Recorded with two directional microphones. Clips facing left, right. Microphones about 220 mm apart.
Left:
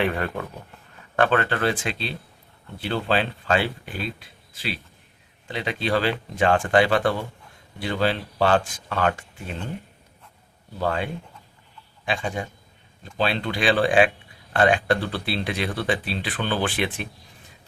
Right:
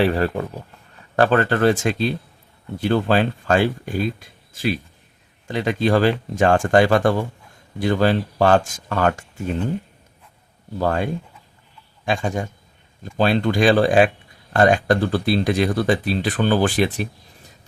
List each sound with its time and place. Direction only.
0.0 s speech: 35° right (ahead or behind)
10.8 s speech: 45° right (ahead or behind)